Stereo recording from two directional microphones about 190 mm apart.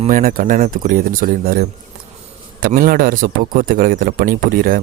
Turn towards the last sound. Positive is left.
turn(degrees=-50)  # may be behind; listen again after turning